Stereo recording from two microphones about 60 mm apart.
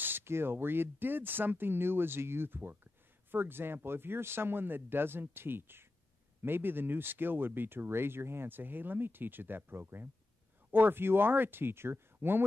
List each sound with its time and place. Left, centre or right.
0.0 s speech: right